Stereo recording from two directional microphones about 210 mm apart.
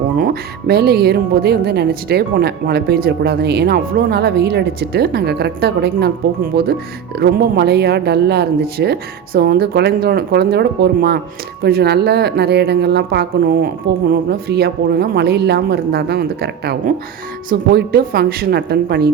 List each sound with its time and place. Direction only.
0.7 s speech: 50° right (ahead or behind)